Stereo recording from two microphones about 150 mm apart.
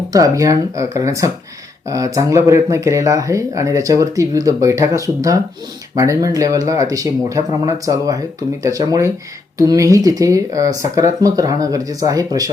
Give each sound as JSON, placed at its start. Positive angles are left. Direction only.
{"t": 0.1, "sound": "speech", "side_deg": -20}